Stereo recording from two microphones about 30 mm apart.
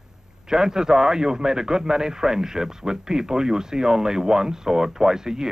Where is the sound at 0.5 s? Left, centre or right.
Centre.